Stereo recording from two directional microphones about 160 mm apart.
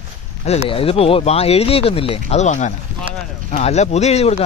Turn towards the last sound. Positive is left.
turn(degrees=45)  # may be behind; listen again after turning